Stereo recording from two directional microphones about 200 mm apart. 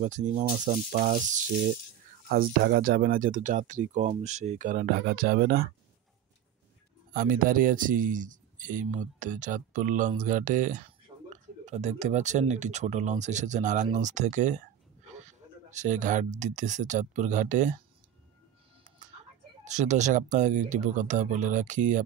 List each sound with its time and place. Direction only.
0.0 s speech: 40° right (ahead or behind)
2.2 s speech: 50° right (ahead or behind)
7.2 s speech: 45° right (ahead or behind)
15.7 s speech: 35° right (ahead or behind)
18.9 s a sound: 40° right (ahead or behind)
19.6 s speech: 35° right (ahead or behind)